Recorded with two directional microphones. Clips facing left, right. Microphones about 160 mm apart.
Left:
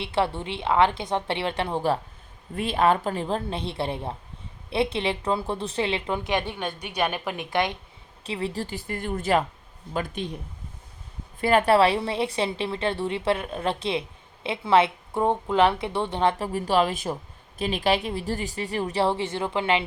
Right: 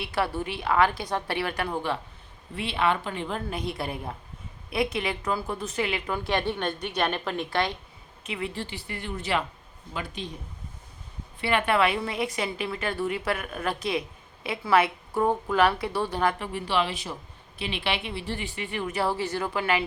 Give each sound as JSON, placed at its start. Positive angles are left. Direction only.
{"t": 0.0, "sound": "a woman's voice", "side_deg": 25}
{"t": 2.6, "sound": "a woman's voice", "side_deg": 40}
{"t": 8.2, "sound": "a woman's voice", "side_deg": 35}
{"t": 11.3, "sound": "a woman's voice", "side_deg": 40}
{"t": 16.4, "sound": "a woman's voice", "side_deg": 40}